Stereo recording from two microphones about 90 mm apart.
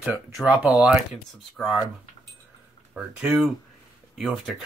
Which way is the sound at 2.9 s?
15° right (ahead or behind).